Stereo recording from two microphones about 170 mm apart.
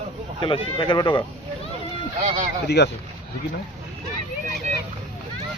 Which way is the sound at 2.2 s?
45° right (ahead or behind).